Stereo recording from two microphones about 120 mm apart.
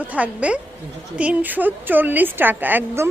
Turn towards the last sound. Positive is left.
turn(degrees=-20)  # may be behind; listen again after turning